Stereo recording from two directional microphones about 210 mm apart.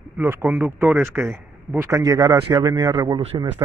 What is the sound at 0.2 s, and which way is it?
A man's voice, 10° right (ahead or behind).